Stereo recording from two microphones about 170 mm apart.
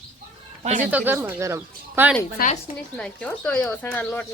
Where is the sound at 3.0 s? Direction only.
5° left (ahead or behind).